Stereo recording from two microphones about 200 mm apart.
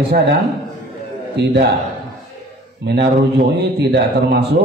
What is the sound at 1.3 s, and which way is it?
Speech, 55° right (ahead or behind).